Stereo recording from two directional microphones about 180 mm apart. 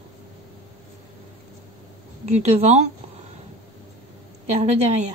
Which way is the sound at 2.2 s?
35° right (ahead or behind).